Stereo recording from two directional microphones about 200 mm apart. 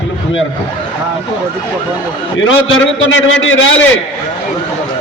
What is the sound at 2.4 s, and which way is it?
A man's voice, 70° left (ahead or behind).